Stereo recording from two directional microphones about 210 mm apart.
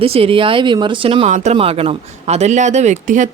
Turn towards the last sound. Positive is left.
turn(degrees=-35)  # may be behind; listen again after turning